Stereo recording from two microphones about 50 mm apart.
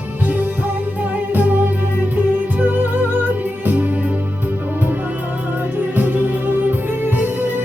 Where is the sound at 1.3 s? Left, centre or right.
Right.